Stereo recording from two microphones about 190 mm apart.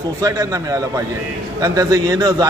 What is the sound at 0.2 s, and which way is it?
A man's voice, 20° right (ahead or behind).